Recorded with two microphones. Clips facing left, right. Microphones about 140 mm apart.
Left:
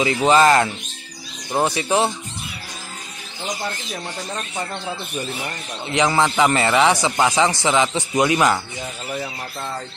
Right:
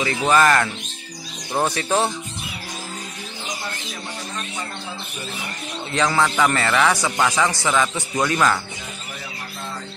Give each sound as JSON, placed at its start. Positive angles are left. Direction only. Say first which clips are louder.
{"t": 0.0, "sound": "speech", "louder": "left 3 dB", "side_deg": 20}
{"t": 1.5, "sound": "speech", "louder": "left 2 dB", "side_deg": 10}
{"t": 5.9, "sound": "speech", "louder": "left 2 dB", "side_deg": 20}